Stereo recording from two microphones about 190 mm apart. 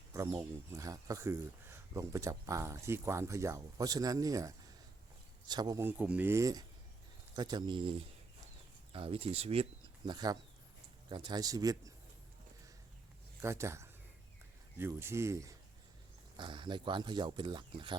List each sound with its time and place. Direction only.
0.1 s speech: 15° right (ahead or behind); by 9.6 s 30° right (ahead or behind)
10.1 s speech: 20° right (ahead or behind)
13.4 s speech: 15° right (ahead or behind)